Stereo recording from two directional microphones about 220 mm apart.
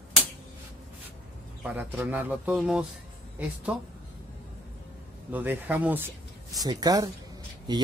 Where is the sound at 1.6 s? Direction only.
5° right (ahead or behind).